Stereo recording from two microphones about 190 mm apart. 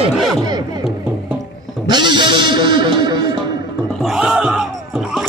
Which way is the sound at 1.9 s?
25° right (ahead or behind).